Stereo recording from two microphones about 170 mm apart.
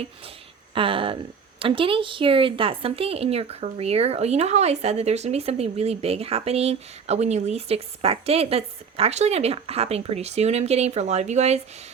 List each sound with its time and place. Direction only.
0.7 s speech: 30° right (ahead or behind)